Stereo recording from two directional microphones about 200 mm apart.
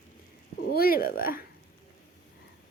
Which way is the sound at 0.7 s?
50° left (ahead or behind).